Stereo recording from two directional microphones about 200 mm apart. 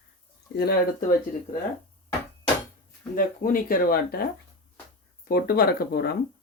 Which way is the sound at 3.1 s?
45° left (ahead or behind).